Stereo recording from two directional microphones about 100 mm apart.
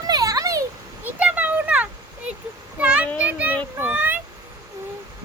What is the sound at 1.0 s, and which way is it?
Children playing, 15° right (ahead or behind).